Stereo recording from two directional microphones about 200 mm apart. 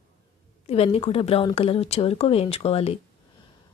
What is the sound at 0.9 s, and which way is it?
Speech, 30° left (ahead or behind).